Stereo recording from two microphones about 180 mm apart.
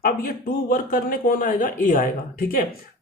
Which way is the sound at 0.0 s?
50° left (ahead or behind).